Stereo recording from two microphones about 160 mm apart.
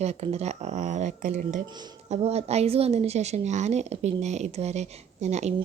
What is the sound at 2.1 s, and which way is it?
A woman's voice, 40° right (ahead or behind).